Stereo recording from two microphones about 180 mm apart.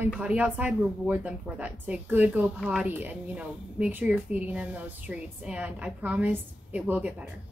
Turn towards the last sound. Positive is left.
turn(degrees=-5)  # may be behind; listen again after turning